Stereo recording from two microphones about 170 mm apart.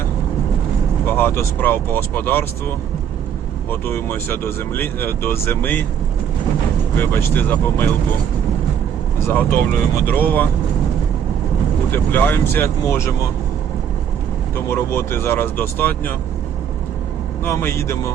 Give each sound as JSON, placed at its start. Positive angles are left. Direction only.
{"t": 1.0, "sound": "speech", "side_deg": 15}
{"t": 6.9, "sound": "speech", "side_deg": 15}
{"t": 9.1, "sound": "speech", "side_deg": 15}
{"t": 11.9, "sound": "speech", "side_deg": 10}
{"t": 14.5, "sound": "speech", "side_deg": 15}
{"t": 17.4, "sound": "speech", "side_deg": 15}